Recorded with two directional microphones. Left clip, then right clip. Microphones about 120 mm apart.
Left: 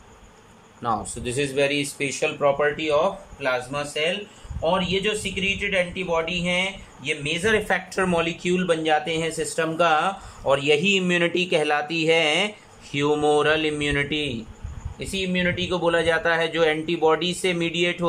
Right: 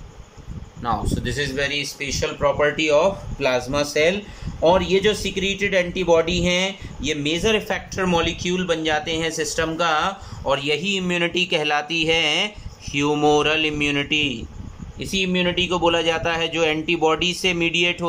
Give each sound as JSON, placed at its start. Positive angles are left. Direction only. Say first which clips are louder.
{"t": 0.8, "sound": "speech", "louder": "right 2 dB", "side_deg": 20}
{"t": 2.7, "sound": "a man's voice", "louder": "right 4 dB", "side_deg": -10}
{"t": 3.3, "sound": "a man's voice", "louder": "right 4 dB", "side_deg": -35}
{"t": 7.6, "sound": "speech", "louder": "left 1 dB", "side_deg": 0}
{"t": 15.0, "sound": "a man's voice", "louder": "right 4 dB", "side_deg": -20}